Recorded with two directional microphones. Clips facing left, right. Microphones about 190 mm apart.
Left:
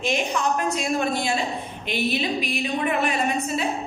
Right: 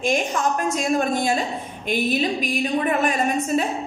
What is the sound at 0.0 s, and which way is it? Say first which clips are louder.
A woman's voice: right 2 dB; 45° right (ahead or behind).